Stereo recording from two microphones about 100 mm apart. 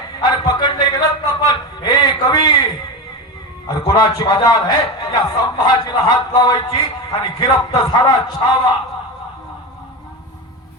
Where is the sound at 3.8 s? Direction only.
45° left (ahead or behind).